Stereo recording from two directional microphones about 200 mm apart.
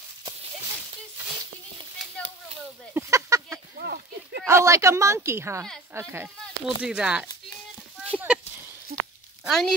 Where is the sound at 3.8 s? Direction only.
55° right (ahead or behind).